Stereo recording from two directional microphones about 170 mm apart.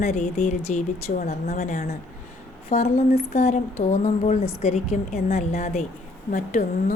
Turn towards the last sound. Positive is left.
turn(degrees=60)  # may be behind; listen again after turning